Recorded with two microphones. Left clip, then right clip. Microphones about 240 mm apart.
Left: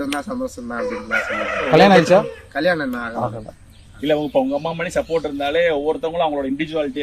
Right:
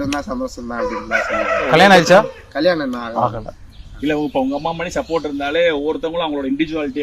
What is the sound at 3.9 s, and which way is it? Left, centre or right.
A man's voice, left.